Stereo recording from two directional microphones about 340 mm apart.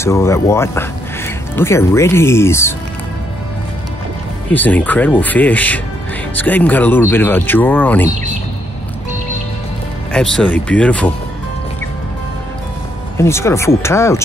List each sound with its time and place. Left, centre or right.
0.0 s speech: centre
4.5 s speech: centre
10.1 s speech: centre
13.2 s speech: centre